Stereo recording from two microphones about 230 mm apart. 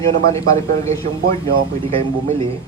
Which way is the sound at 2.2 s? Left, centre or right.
Right.